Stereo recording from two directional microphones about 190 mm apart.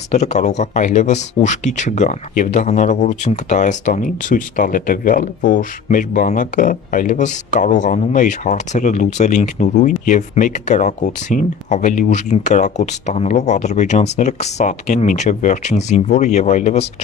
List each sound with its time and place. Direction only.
0.1 s speech: 35° left (ahead or behind)